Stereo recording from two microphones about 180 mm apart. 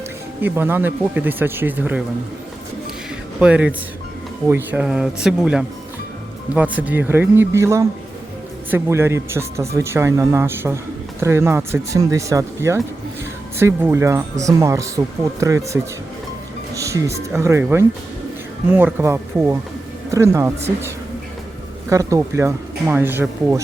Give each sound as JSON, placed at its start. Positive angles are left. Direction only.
{"t": 0.4, "sound": "speech", "side_deg": -10}
{"t": 3.4, "sound": "speech", "side_deg": -5}
{"t": 21.8, "sound": "speech", "side_deg": -15}